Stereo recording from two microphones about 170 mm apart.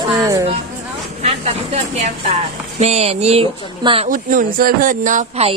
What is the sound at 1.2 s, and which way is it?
Speech, 40° right (ahead or behind).